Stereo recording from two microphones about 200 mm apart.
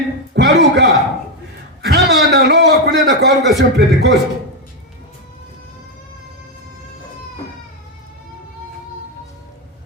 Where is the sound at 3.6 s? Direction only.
60° right (ahead or behind).